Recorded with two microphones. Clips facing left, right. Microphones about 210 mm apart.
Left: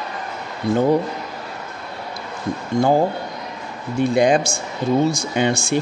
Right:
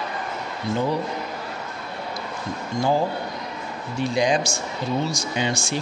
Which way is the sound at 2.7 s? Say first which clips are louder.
Left 6 dB; 55° left (ahead or behind).